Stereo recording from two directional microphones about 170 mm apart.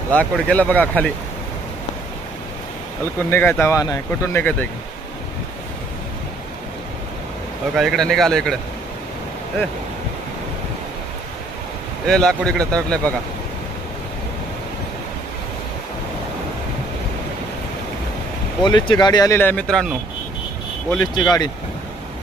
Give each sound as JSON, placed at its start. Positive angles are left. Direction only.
{"t": 0.1, "sound": "speech", "side_deg": 5}
{"t": 3.3, "sound": "speech", "side_deg": 10}
{"t": 7.7, "sound": "speech", "side_deg": 0}
{"t": 12.1, "sound": "speech", "side_deg": 5}
{"t": 18.6, "sound": "speech", "side_deg": 25}
{"t": 19.3, "sound": "speech", "side_deg": 10}
{"t": 21.0, "sound": "speech", "side_deg": 25}